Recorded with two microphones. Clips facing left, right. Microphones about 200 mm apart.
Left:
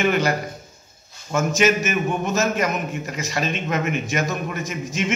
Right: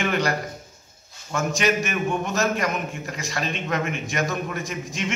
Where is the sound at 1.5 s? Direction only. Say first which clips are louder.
Left 4 dB; 5° left (ahead or behind).